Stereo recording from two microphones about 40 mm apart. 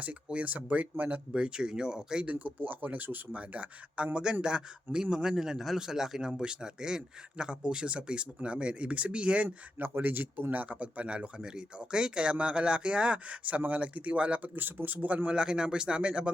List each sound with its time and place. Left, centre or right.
0.4 s speech: right
1.4 s speech: right
2.4 s speech: right
5.4 s speech: centre; by 9.5 s right
9.7 s speech: right
14.5 s speech: right
15.0 s speech: right
15.4 s speech: right